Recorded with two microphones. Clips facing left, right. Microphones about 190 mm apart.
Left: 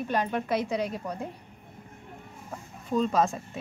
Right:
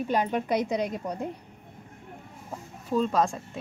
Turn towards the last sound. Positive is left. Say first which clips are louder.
# even
turn(degrees=5)  # may be behind; listen again after turning